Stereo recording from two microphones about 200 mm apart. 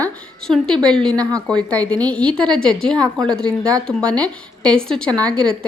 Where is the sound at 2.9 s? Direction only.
20° right (ahead or behind).